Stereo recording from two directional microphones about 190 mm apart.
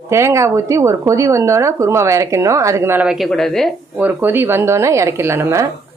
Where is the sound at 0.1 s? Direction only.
15° right (ahead or behind); by 3.8 s centre (ahead or behind).